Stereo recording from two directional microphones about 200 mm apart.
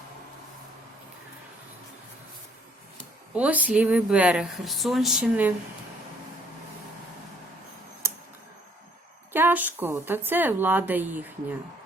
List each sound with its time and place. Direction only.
3.3 s speech: 5° right (ahead or behind)
9.3 s a woman's voice: 10° right (ahead or behind)